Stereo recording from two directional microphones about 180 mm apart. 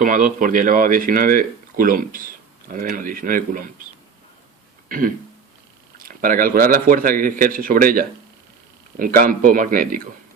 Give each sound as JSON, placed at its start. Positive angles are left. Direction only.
{"t": 0.0, "sound": "speech", "side_deg": -45}
{"t": 4.9, "sound": "speech", "side_deg": -50}